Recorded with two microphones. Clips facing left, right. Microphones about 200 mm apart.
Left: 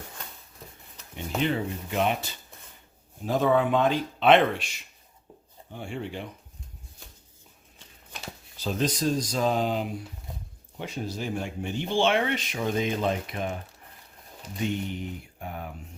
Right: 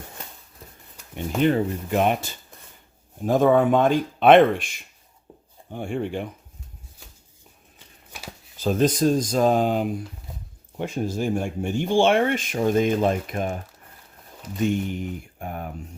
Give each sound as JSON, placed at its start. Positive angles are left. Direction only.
{"t": 1.1, "sound": "speech", "side_deg": -45}
{"t": 8.5, "sound": "speech", "side_deg": -50}
{"t": 14.6, "sound": "speech", "side_deg": -50}